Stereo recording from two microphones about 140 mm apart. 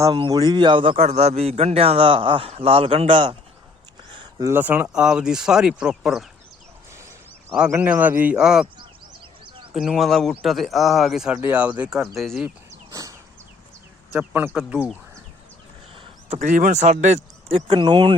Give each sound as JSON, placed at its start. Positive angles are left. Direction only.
{"t": 0.0, "sound": "a man's voice", "side_deg": -30}
{"t": 4.1, "sound": "a sound", "side_deg": -25}
{"t": 4.5, "sound": "speech", "side_deg": -10}
{"t": 7.7, "sound": "speech", "side_deg": -10}
{"t": 9.7, "sound": "speech", "side_deg": -5}
{"t": 12.9, "sound": "bird", "side_deg": -25}
{"t": 14.2, "sound": "speech", "side_deg": -15}
{"t": 16.0, "sound": "speech", "side_deg": -50}
{"t": 17.5, "sound": "speech", "side_deg": -35}